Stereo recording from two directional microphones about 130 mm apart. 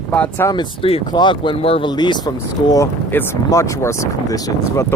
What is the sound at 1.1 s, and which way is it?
Speech, 35° left (ahead or behind).